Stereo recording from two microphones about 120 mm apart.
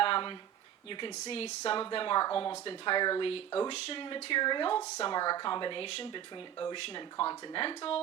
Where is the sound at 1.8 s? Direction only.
45° left (ahead or behind).